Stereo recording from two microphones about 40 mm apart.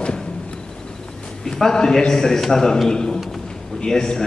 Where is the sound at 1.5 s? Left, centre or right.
Centre.